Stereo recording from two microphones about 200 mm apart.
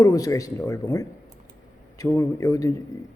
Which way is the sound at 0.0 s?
15° left (ahead or behind).